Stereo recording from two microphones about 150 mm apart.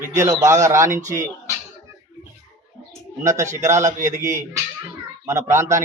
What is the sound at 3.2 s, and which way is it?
A man's voice, 20° right (ahead or behind).